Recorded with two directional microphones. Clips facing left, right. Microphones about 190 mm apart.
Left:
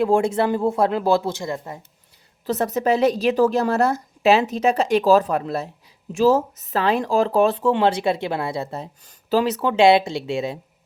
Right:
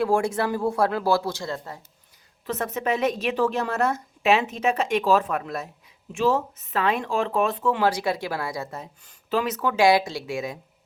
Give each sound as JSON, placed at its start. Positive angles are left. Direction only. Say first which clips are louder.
{"t": 0.0, "sound": "speech", "louder": "left 4 dB", "side_deg": 20}
{"t": 2.5, "sound": "a woman's voice", "louder": "left 6 dB", "side_deg": 35}